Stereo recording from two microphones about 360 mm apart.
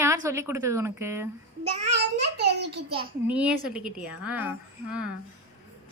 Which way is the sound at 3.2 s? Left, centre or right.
Centre.